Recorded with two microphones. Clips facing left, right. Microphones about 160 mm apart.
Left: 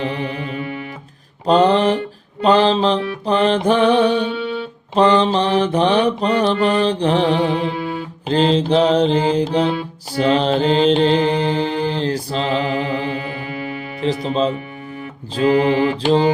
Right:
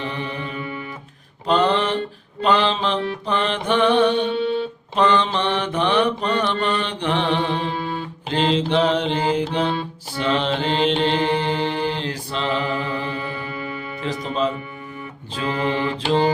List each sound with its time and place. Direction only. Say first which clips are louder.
0.0 s music: left 5 dB; 35° left (ahead or behind)
1.5 s mantra: left 5 dB; 35° left (ahead or behind)
14.0 s speech: left 5 dB; 30° left (ahead or behind)
15.4 s mantra: left 8 dB; 35° left (ahead or behind)